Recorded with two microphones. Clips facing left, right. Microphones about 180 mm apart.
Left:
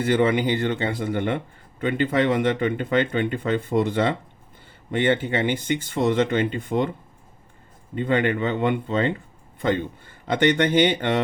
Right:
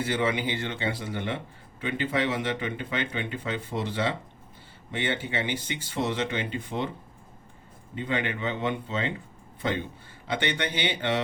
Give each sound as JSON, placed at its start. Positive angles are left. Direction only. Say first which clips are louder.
{"t": 0.0, "sound": "speech", "louder": "left 7 dB", "side_deg": 55}
{"t": 7.9, "sound": "speech", "louder": "left 8 dB", "side_deg": 55}
{"t": 10.2, "sound": "speech", "louder": "left 9 dB", "side_deg": 50}